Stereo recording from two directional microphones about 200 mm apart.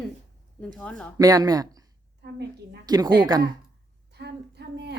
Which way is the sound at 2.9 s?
20° right (ahead or behind).